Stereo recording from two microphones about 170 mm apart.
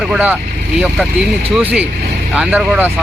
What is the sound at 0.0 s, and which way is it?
Speech, 5° right (ahead or behind).